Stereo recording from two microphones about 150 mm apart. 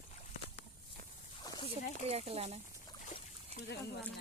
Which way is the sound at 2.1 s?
45° right (ahead or behind).